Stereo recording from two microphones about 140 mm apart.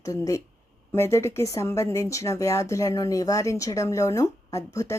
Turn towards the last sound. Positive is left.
turn(degrees=20)  # may be behind; listen again after turning